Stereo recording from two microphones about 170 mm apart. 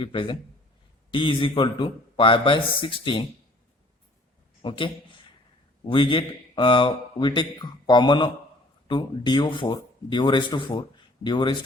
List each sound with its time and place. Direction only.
0.0 s speech: 30° left (ahead or behind)
4.6 s speech: 30° left (ahead or behind)